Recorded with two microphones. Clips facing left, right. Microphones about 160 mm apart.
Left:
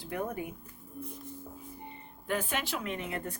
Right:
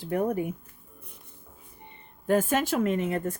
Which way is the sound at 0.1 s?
40° right (ahead or behind).